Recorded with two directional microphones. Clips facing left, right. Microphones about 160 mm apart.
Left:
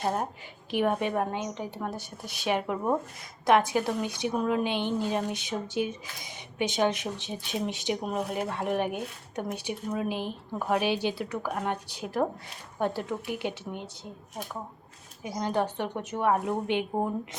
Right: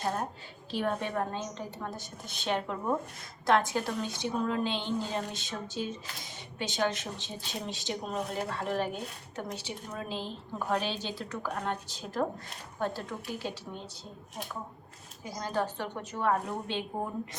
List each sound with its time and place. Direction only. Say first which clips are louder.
0.7 s a woman's voice: left 5 dB; 15° left (ahead or behind)
15.2 s a woman's voice: left 4 dB; 20° left (ahead or behind)